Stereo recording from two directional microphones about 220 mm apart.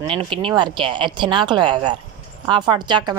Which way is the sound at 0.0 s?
25° right (ahead or behind).